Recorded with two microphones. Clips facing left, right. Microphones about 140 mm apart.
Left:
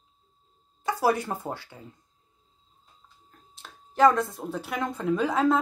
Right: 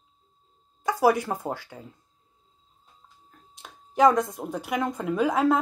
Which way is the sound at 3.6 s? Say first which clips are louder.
Right 1 dB; 15° right (ahead or behind).